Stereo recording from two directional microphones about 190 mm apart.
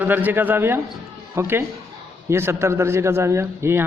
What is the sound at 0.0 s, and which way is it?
Speech, 10° right (ahead or behind).